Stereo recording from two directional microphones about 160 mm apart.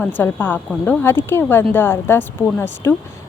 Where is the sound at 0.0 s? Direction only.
10° left (ahead or behind).